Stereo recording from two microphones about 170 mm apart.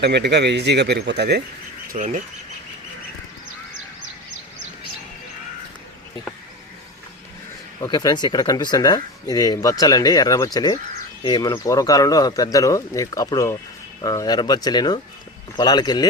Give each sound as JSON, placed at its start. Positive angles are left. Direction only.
{"t": 0.0, "sound": "speech", "side_deg": -85}
{"t": 1.9, "sound": "speech", "side_deg": -50}
{"t": 7.8, "sound": "speech", "side_deg": 25}